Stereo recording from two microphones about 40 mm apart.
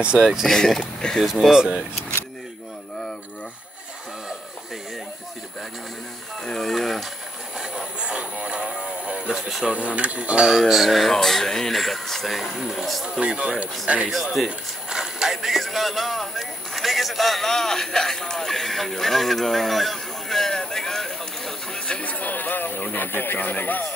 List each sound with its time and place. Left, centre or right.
0.2 s speech: centre
0.5 s speech: centre
1.2 s speech: centre
6.4 s speech: centre
8.0 s a sound: right
9.3 s speech: centre
9.8 s speech: right
10.7 s speech: centre
13.2 s speech: right
14.1 s speech: centre
14.9 s a sound: centre
21.7 s a sound: left
22.1 s a sound: left